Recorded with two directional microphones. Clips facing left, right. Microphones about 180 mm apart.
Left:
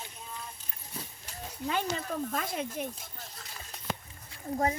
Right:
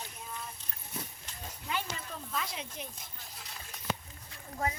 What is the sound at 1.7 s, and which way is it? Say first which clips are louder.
Speech: left 6 dB; 50° left (ahead or behind).